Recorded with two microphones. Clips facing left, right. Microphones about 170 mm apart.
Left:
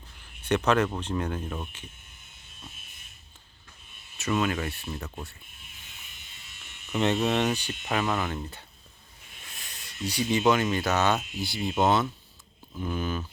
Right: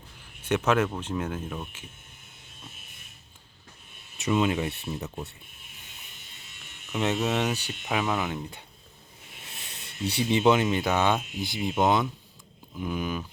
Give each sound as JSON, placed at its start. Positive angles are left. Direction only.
{"t": 0.4, "sound": "speech", "side_deg": -10}
{"t": 4.2, "sound": "speech", "side_deg": -20}
{"t": 6.9, "sound": "speech", "side_deg": -5}
{"t": 9.6, "sound": "speech", "side_deg": -25}